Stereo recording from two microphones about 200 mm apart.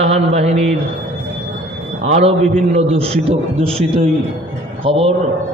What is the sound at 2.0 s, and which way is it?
A man's voice, 30° right (ahead or behind).